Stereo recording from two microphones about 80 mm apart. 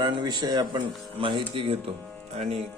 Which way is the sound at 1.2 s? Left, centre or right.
Right.